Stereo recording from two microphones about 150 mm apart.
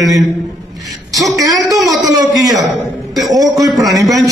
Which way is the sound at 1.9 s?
25° right (ahead or behind).